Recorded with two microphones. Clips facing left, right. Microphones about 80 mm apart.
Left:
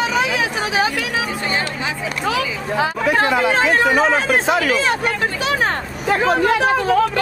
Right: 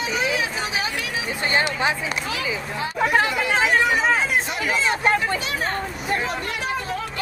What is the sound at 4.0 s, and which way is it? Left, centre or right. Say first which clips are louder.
Speech: left 5 dB; left.